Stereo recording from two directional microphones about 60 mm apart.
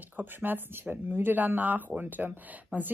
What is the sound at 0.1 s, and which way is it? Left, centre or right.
Speech, right.